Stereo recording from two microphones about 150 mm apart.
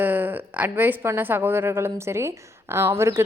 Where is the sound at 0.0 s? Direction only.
10° right (ahead or behind).